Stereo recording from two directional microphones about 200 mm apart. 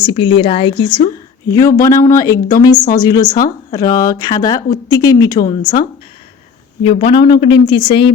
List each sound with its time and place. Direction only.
0.0 s speech: 25° left (ahead or behind)
7.0 s speech: 25° left (ahead or behind)